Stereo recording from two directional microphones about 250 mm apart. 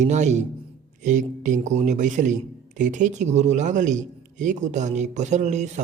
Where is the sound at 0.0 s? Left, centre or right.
Right.